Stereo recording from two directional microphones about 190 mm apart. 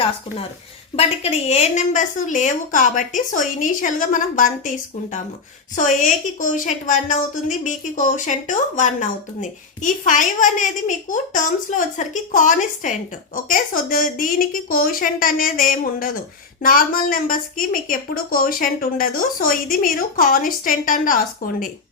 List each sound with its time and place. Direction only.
0.9 s a woman's voice: 35° left (ahead or behind)
5.7 s a woman's voice: 45° left (ahead or behind)